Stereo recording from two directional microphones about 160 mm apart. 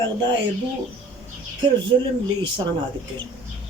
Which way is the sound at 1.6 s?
30° right (ahead or behind).